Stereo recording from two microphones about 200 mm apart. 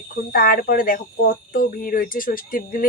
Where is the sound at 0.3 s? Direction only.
45° left (ahead or behind).